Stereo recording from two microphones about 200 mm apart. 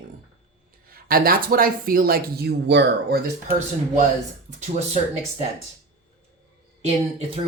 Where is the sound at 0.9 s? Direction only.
45° right (ahead or behind).